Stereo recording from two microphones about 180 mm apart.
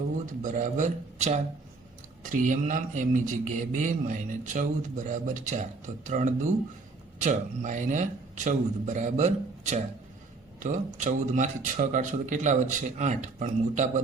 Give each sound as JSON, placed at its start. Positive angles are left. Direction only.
{"t": 0.4, "sound": "a man's voice", "side_deg": -45}